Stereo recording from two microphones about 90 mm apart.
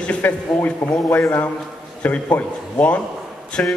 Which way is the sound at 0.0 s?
15° left (ahead or behind).